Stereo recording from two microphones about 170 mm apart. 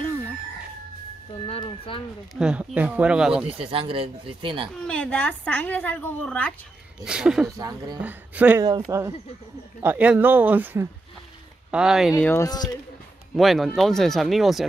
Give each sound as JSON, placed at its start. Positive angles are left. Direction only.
{"t": 1.5, "sound": "a sound", "side_deg": 30}
{"t": 2.3, "sound": "speech", "side_deg": -5}
{"t": 3.4, "sound": "speech", "side_deg": -35}
{"t": 4.8, "sound": "a woman's voice", "side_deg": 5}
{"t": 7.1, "sound": "speech", "side_deg": -5}
{"t": 7.4, "sound": "speech", "side_deg": -20}
{"t": 8.0, "sound": "speech", "side_deg": -10}
{"t": 8.6, "sound": "speech", "side_deg": -20}
{"t": 12.2, "sound": "a woman's voice", "side_deg": 15}
{"t": 13.4, "sound": "speech", "side_deg": 0}